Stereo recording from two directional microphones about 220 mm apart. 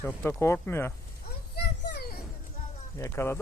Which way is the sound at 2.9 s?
10° left (ahead or behind).